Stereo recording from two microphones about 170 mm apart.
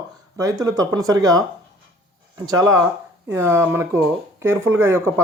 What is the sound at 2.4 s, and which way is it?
Speech, 20° right (ahead or behind).